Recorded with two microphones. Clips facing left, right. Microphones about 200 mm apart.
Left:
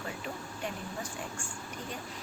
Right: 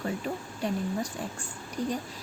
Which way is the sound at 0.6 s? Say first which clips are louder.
Right 8 dB; 35° right (ahead or behind).